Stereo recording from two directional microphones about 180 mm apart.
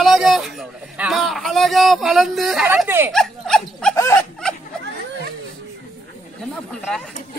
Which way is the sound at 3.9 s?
15° left (ahead or behind).